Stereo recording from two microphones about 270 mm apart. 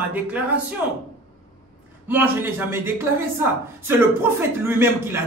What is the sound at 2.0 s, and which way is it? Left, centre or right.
Speech, centre.